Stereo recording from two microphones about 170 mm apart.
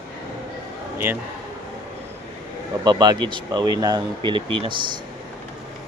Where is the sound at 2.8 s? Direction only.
25° right (ahead or behind).